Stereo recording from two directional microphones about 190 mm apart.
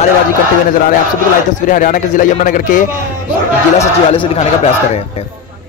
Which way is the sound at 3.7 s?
30° left (ahead or behind).